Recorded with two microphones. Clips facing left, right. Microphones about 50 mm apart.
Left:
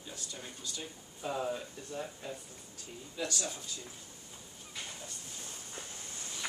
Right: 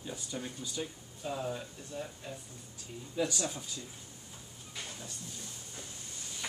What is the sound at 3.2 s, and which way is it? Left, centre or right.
Speech, centre.